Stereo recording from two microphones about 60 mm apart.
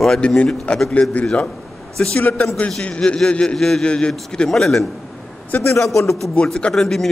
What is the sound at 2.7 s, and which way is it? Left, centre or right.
A man's voice, centre.